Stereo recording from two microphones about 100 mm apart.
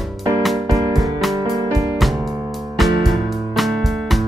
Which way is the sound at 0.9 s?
Centre (ahead or behind).